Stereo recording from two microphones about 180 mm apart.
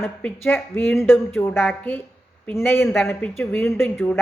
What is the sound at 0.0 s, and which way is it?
Speech, 5° left (ahead or behind).